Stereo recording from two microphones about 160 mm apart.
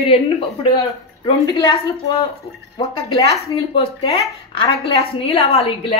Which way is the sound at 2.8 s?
30° left (ahead or behind).